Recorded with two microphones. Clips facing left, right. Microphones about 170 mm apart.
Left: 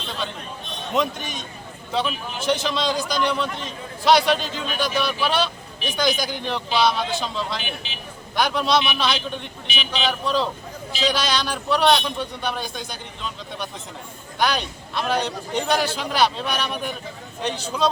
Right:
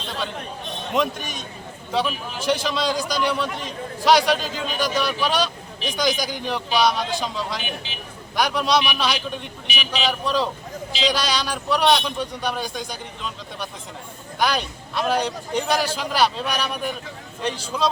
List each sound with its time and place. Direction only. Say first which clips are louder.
0.9 s a man's voice: even; 5° right (ahead or behind)